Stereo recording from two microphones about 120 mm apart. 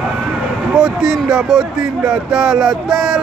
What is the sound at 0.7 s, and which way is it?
Speech, 5° right (ahead or behind).